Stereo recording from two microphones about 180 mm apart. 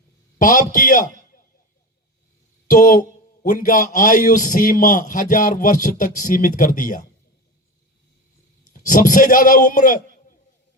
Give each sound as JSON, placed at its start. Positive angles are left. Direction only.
{"t": 0.3, "sound": "a man's voice", "side_deg": 50}
{"t": 2.6, "sound": "a man's voice", "side_deg": 50}
{"t": 8.7, "sound": "a man's voice", "side_deg": 50}